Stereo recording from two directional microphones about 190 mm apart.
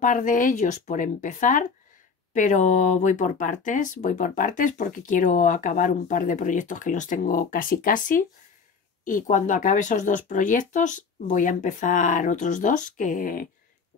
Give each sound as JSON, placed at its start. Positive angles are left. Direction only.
{"t": 0.0, "sound": "speech", "side_deg": 45}